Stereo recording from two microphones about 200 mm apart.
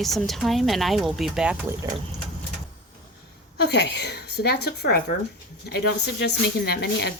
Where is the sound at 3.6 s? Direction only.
55° left (ahead or behind).